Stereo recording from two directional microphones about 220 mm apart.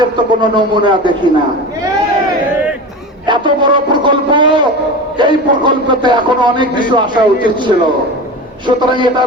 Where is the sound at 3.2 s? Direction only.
20° right (ahead or behind).